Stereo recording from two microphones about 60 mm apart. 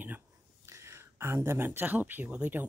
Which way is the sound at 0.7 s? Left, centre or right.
Right.